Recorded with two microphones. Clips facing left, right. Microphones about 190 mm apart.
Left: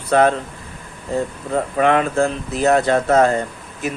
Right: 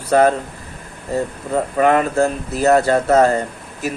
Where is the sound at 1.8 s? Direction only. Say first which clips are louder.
Right 1 dB; 45° right (ahead or behind).